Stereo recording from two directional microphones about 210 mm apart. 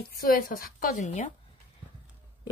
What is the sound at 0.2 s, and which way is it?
A woman's voice, 45° left (ahead or behind).